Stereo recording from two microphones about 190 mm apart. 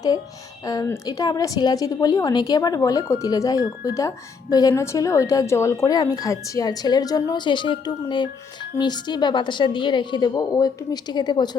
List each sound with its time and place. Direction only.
0.6 s speech: 20° left (ahead or behind)